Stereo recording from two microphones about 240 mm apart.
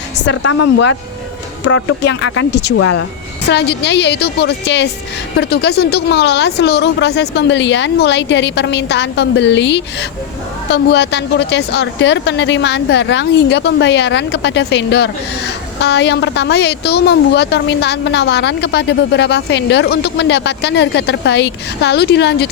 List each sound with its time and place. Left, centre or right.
0.2 s speech: left
2.7 s speech: left
3.5 s speech: left